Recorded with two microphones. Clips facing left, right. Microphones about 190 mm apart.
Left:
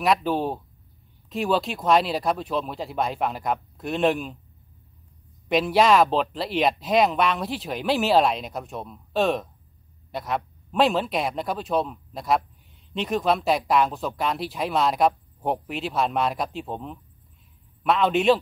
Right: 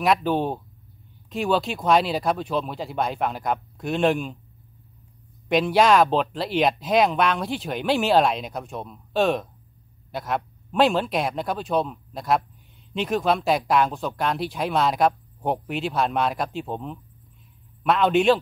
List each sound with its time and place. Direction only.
0.0 s speech: centre (ahead or behind)
5.5 s speech: centre (ahead or behind)